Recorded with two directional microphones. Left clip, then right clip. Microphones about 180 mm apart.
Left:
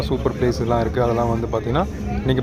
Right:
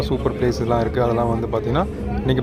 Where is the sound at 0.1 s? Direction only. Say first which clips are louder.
Left 2 dB; centre (ahead or behind).